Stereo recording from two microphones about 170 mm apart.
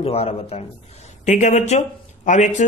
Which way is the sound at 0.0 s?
35° left (ahead or behind).